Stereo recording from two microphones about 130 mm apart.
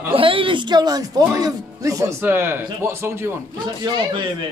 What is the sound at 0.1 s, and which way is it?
Speech, 40° right (ahead or behind).